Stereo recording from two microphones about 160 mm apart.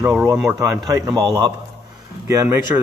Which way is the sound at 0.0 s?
10° right (ahead or behind).